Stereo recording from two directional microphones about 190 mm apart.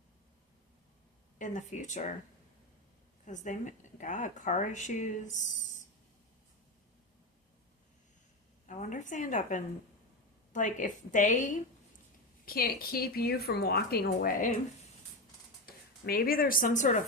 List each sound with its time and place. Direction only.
1.4 s speech: 40° left (ahead or behind)
3.2 s speech: 40° left (ahead or behind)
8.6 s speech: 40° left (ahead or behind)
12.5 s a woman's voice: 50° left (ahead or behind)
15.6 s speech: 50° left (ahead or behind)